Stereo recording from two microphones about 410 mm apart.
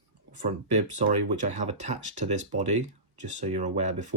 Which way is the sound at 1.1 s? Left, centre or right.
Right.